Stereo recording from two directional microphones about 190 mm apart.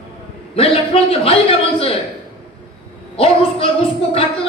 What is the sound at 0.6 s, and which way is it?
Speech, 30° left (ahead or behind).